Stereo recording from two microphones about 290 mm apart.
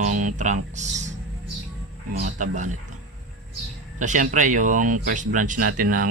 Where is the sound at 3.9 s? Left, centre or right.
Right.